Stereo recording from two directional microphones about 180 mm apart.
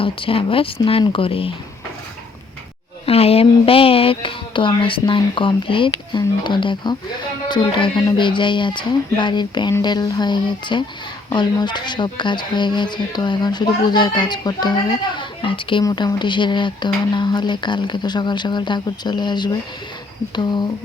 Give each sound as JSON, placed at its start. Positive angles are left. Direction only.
{"t": 0.0, "sound": "speech", "side_deg": 30}
{"t": 3.1, "sound": "speech", "side_deg": 35}